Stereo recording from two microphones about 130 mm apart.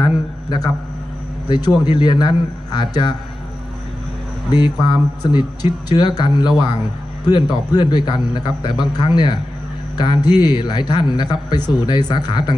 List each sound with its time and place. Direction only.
0.0 s a sound: 35° left (ahead or behind)
1.5 s a man's voice: 30° left (ahead or behind)
4.5 s a man's voice: 35° left (ahead or behind)